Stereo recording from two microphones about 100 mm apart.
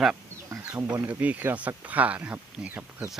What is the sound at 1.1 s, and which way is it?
Speech, 15° right (ahead or behind).